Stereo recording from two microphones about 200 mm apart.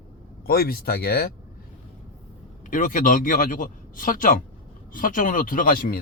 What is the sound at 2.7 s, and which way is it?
Speech, 45° left (ahead or behind).